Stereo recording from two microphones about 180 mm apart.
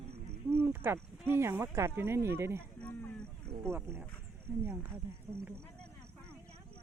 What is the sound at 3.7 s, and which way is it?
Speech, 15° right (ahead or behind).